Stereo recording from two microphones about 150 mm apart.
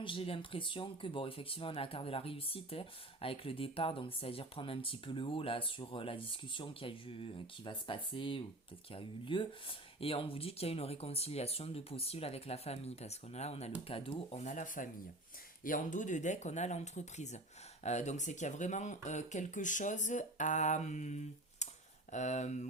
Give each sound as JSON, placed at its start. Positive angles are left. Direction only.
{"t": 0.0, "sound": "speech", "side_deg": 35}